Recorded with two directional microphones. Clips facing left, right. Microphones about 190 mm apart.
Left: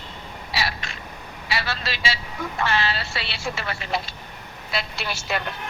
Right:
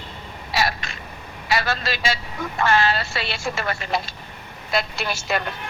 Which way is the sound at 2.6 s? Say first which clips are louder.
Right 5 dB; 45° right (ahead or behind).